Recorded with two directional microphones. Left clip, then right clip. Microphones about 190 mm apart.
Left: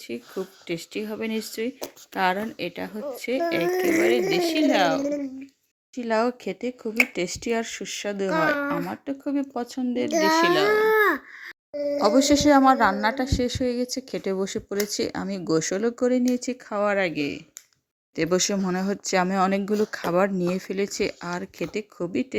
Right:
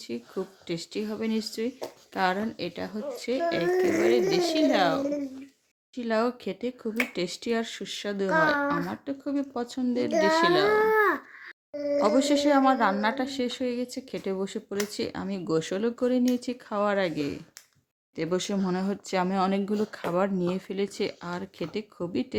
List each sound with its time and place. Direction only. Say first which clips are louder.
0.1 s speech: left 2 dB; 15° left (ahead or behind)
3.7 s speech: left 1 dB; 45° left (ahead or behind)
4.3 s speech: left 2 dB; 15° left (ahead or behind)
10.1 s speech: left 3 dB; 45° left (ahead or behind)
10.4 s speech: left 2 dB; 10° left (ahead or behind)
10.7 s speech: left 3 dB; 45° left (ahead or behind); by 17.4 s 15° left (ahead or behind)
18.2 s speech: left 5 dB; 25° left (ahead or behind)